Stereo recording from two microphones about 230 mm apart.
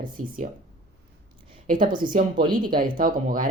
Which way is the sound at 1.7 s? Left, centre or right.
Right.